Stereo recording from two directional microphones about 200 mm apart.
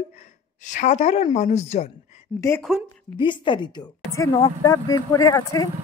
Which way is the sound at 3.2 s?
25° left (ahead or behind).